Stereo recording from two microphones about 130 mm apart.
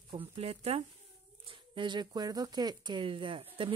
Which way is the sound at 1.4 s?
40° right (ahead or behind).